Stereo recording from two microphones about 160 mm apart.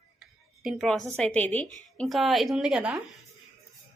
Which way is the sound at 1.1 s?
10° left (ahead or behind).